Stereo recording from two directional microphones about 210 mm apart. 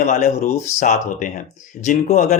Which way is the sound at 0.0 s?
35° left (ahead or behind).